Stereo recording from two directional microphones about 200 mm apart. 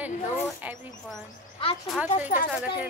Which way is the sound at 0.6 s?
10° right (ahead or behind).